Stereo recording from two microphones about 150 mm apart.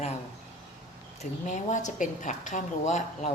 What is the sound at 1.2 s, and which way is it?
A woman's voice, 55° left (ahead or behind).